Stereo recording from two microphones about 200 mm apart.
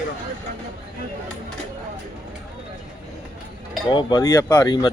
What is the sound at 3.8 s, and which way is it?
Speech, 20° left (ahead or behind).